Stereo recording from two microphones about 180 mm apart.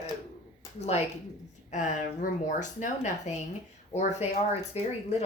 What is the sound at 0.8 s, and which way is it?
A woman's voice, 35° left (ahead or behind).